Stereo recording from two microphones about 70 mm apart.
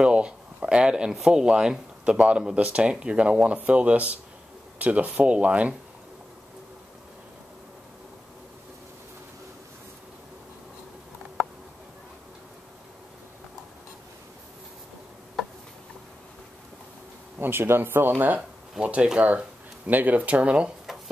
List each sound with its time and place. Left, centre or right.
0.0 s a sound: centre
1.1 s speech: centre
17.4 s speech: right
18.8 s speech: centre